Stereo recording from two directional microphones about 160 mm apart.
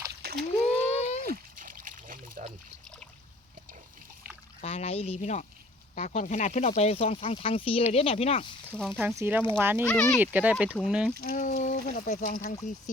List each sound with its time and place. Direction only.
0.6 s a sound: 45° left (ahead or behind)
1.3 s splash: 60° right (ahead or behind)
4.6 s speech: 40° left (ahead or behind)
9.0 s speech: 10° right (ahead or behind)
9.8 s speech: 5° left (ahead or behind)
10.2 s speech: 10° right (ahead or behind)
11.3 s speech: 55° left (ahead or behind)